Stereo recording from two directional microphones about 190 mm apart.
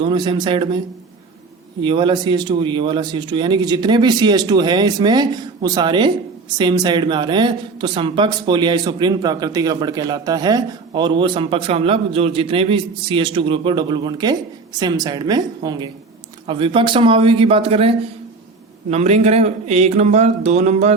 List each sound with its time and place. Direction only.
0.0 s speech: 25° right (ahead or behind)
1.8 s speech: 25° right (ahead or behind)